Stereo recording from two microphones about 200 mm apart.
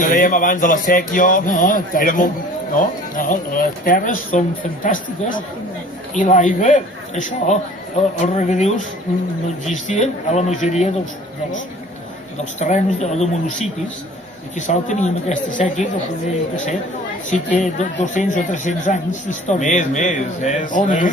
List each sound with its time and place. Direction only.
0.0 s speech: 40° left (ahead or behind)
9.7 s speech: 35° left (ahead or behind)
12.5 s speech: 35° left (ahead or behind)
17.3 s speech: 35° left (ahead or behind)